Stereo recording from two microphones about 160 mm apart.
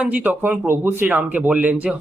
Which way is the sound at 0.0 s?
10° right (ahead or behind).